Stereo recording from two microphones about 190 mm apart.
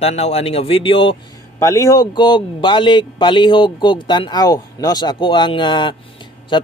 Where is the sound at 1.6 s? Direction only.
15° left (ahead or behind).